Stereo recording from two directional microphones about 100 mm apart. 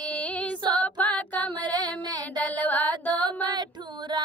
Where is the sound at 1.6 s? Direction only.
45° right (ahead or behind).